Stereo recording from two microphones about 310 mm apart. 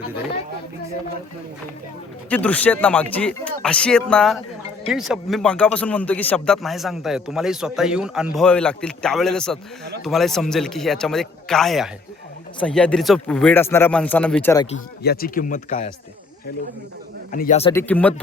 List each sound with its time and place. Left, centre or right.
2.3 s a man's voice: centre
14.7 s speech: left
17.3 s speech: left
17.7 s a man's voice: centre